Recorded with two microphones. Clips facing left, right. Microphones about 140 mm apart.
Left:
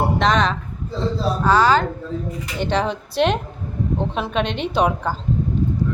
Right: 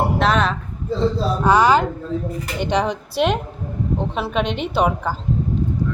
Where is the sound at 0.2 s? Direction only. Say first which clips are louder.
Left 1 dB; 5° right (ahead or behind).